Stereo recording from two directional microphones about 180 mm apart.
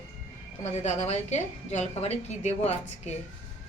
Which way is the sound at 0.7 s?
40° left (ahead or behind).